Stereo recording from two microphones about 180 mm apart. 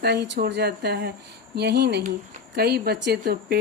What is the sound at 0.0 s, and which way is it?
A woman's voice, 65° right (ahead or behind).